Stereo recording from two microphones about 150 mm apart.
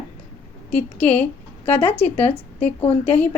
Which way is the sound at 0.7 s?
10° left (ahead or behind).